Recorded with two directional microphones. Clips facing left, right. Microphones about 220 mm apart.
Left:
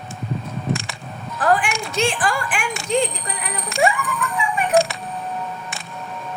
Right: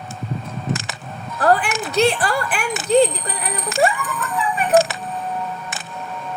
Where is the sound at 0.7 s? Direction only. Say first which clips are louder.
Left 1 dB; centre (ahead or behind).